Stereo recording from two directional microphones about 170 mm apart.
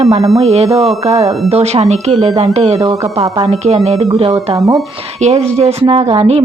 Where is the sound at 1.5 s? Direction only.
40° right (ahead or behind).